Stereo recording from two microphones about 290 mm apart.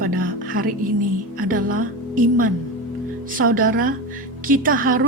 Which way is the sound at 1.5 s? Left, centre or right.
Right.